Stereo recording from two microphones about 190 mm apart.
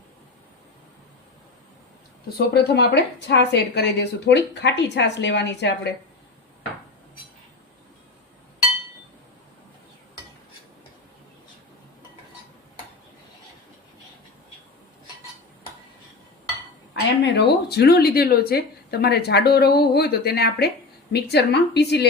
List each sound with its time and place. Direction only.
2.4 s a woman's voice: 60° left (ahead or behind)
16.9 s a woman's voice: 60° left (ahead or behind)